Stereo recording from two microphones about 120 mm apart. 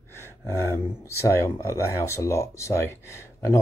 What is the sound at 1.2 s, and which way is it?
Speech, 25° left (ahead or behind).